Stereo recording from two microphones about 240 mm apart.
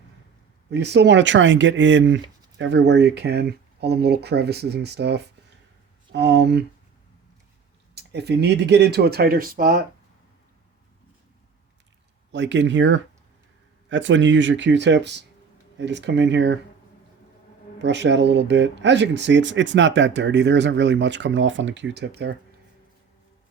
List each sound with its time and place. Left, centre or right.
0.7 s speech: right
7.9 s speech: right
12.3 s speech: right
17.7 s speech: right